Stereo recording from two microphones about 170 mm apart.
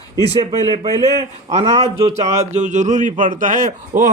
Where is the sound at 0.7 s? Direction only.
30° right (ahead or behind).